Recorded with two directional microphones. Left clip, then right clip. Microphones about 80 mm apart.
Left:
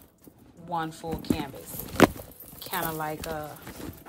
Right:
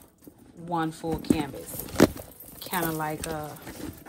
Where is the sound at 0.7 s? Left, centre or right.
Left.